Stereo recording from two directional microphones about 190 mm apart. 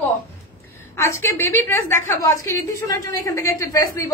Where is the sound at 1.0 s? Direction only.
15° left (ahead or behind).